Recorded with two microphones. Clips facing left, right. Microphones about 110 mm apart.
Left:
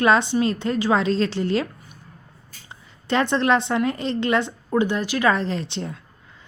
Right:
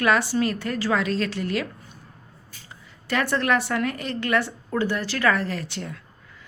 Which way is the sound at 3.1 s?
25° left (ahead or behind).